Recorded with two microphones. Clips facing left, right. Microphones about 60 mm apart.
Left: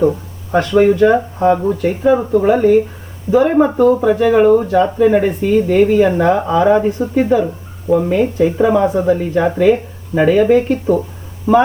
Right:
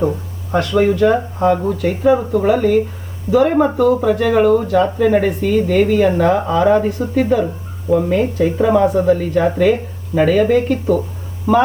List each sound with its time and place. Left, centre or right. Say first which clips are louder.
0.7 s speech: left 3 dB; centre
2.0 s speech: left 1 dB; centre